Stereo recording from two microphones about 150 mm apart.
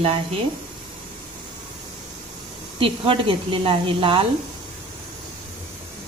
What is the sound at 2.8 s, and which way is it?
Speech, 35° right (ahead or behind).